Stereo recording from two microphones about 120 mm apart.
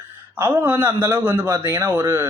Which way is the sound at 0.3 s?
15° right (ahead or behind).